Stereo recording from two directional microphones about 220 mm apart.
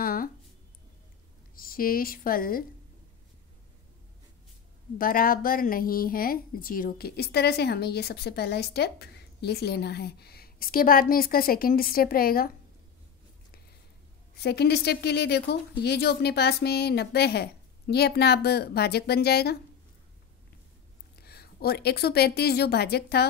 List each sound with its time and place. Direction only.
0.0 s a sound: 40° left (ahead or behind)
1.5 s a woman's voice: 40° left (ahead or behind)
4.9 s a woman's voice: 40° left (ahead or behind)
14.4 s speech: 50° left (ahead or behind)
21.2 s a woman's voice: 45° left (ahead or behind)